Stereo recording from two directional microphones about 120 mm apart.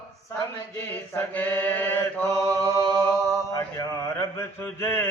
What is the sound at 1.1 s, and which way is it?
Mantra, 15° left (ahead or behind).